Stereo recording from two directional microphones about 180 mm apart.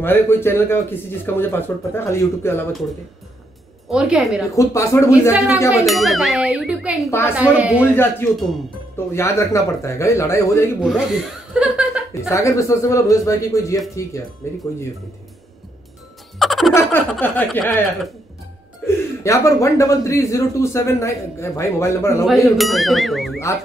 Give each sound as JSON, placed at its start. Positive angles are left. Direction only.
{"t": 0.0, "sound": "a man's voice", "side_deg": 10}
{"t": 3.9, "sound": "a sound", "side_deg": -5}
{"t": 4.6, "sound": "a man's voice", "side_deg": 15}
{"t": 5.7, "sound": "a sound", "side_deg": 0}
{"t": 7.1, "sound": "a man's voice", "side_deg": 15}
{"t": 7.3, "sound": "speech", "side_deg": -5}
{"t": 7.8, "sound": "a man's voice", "side_deg": 10}
{"t": 10.8, "sound": "a sound", "side_deg": 0}
{"t": 11.6, "sound": "speech", "side_deg": -5}
{"t": 12.2, "sound": "a man's voice", "side_deg": 15}
{"t": 16.3, "sound": "a man's voice", "side_deg": 0}
{"t": 22.2, "sound": "a sound", "side_deg": 0}